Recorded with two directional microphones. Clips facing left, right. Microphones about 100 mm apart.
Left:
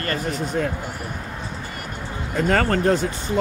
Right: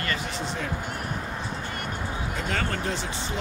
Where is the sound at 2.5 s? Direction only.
45° left (ahead or behind).